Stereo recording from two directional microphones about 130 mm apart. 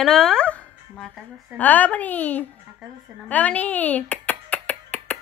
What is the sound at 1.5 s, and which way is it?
Speech, 10° left (ahead or behind).